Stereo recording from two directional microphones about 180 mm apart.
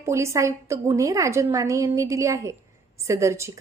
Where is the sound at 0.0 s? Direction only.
15° right (ahead or behind).